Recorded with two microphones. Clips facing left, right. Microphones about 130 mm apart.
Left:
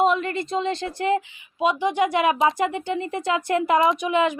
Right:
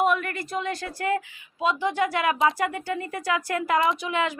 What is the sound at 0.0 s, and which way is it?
Speech, 25° left (ahead or behind).